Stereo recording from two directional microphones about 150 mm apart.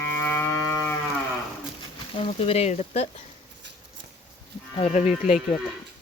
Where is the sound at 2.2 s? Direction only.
45° left (ahead or behind).